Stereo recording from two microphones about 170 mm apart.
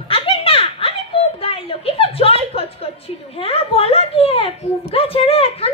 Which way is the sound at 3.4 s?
35° left (ahead or behind).